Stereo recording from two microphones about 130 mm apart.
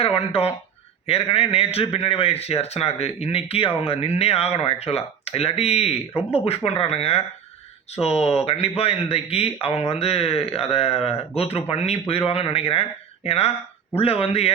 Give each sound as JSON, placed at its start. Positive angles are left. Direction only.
{"t": 0.0, "sound": "speech", "side_deg": 50}